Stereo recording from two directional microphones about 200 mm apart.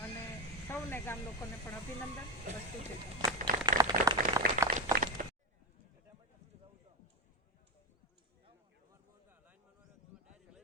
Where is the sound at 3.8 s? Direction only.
20° right (ahead or behind).